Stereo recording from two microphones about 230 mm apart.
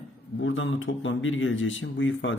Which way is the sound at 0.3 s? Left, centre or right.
Left.